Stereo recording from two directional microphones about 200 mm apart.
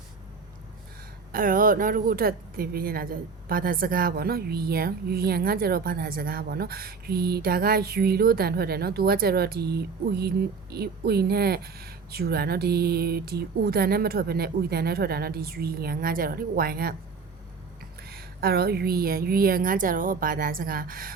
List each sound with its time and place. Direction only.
1.3 s a woman's voice: 45° right (ahead or behind)
18.1 s a woman's voice: 50° right (ahead or behind)